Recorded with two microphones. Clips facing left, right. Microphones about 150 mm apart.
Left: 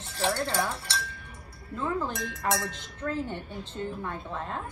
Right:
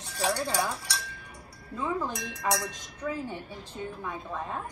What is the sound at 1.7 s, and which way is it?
A woman's voice, 15° right (ahead or behind).